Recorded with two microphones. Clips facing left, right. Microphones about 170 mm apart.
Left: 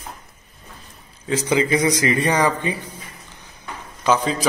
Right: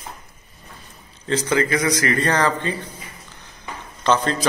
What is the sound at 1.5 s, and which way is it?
Speech, 15° left (ahead or behind).